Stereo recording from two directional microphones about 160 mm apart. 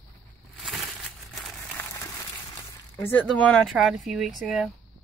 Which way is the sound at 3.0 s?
10° left (ahead or behind).